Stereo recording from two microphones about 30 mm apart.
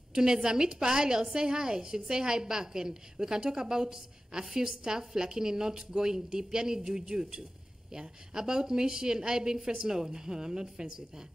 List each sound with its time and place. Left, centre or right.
0.1 s a woman's voice: right